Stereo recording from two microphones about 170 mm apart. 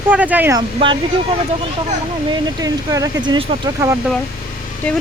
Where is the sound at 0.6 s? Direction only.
30° right (ahead or behind).